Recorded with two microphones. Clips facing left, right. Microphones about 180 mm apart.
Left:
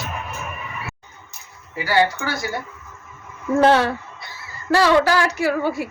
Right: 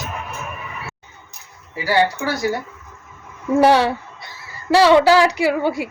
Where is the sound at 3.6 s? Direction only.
10° right (ahead or behind).